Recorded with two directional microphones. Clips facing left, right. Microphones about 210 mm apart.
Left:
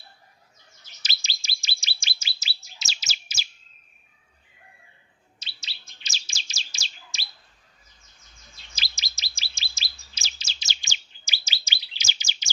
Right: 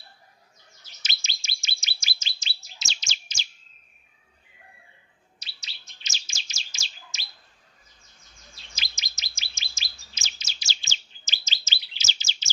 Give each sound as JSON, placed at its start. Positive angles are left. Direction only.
{"t": 1.0, "sound": "bird", "side_deg": 35}
{"t": 2.1, "sound": "chirp", "side_deg": 10}
{"t": 5.4, "sound": "chirp", "side_deg": 30}
{"t": 8.7, "sound": "chirp", "side_deg": 35}